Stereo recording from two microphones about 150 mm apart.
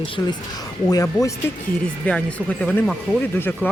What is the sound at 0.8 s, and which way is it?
Speech, 25° left (ahead or behind).